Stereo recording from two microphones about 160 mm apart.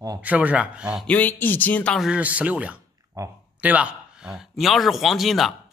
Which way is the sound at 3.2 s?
20° right (ahead or behind).